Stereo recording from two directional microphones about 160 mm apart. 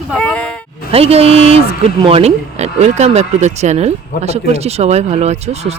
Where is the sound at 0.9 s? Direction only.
40° right (ahead or behind).